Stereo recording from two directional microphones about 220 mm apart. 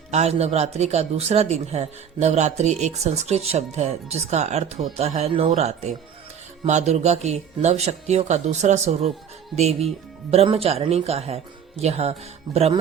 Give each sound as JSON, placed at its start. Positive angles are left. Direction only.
{"t": 0.1, "sound": "a man's voice", "side_deg": -30}